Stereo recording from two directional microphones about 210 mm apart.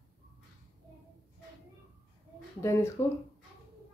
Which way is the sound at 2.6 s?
15° left (ahead or behind).